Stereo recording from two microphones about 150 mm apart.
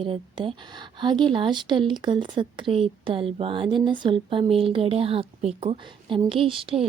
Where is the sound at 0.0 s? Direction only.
35° right (ahead or behind).